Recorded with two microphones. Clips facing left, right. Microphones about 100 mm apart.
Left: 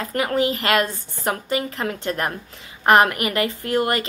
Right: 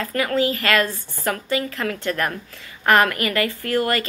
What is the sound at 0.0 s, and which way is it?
A woman's voice, 20° left (ahead or behind).